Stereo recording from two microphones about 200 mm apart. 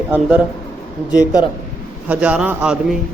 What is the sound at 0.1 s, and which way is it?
Speech, 5° right (ahead or behind).